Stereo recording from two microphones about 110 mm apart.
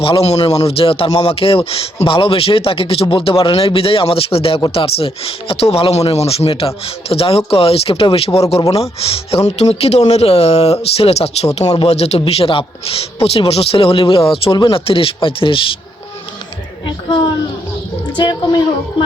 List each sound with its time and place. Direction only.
0.0 s speech: 60° left (ahead or behind)
18.2 s speech: 40° left (ahead or behind)